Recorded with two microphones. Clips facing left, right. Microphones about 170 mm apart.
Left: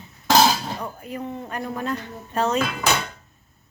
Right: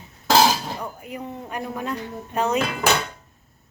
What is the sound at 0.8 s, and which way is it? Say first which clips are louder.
A woman's voice: left 1 dB; 10° right (ahead or behind).